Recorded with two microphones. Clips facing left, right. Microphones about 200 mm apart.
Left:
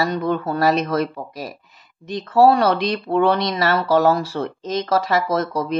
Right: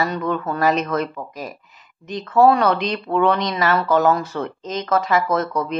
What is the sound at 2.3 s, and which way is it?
Speech, 35° left (ahead or behind).